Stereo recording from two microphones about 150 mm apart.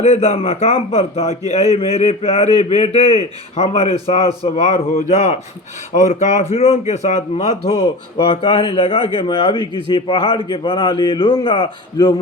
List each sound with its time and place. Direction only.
0.0 s speech: 50° left (ahead or behind); by 12.1 s 30° left (ahead or behind)